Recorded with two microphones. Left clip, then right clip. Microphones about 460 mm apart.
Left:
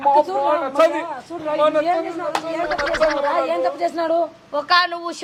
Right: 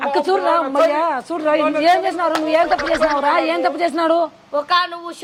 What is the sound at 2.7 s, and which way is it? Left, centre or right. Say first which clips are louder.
Speech: right 2 dB; centre.